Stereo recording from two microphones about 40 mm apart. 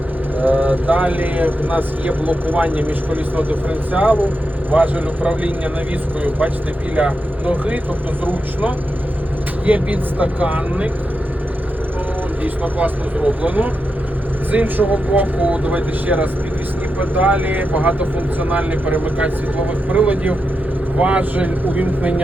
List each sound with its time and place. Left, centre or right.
0.3 s speech: right
7.4 s speech: right
12.4 s speech: right